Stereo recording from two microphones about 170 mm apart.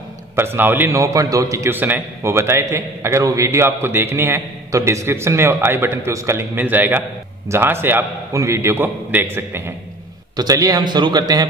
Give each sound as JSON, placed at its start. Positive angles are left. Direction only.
{"t": 0.4, "sound": "a man's voice", "side_deg": -15}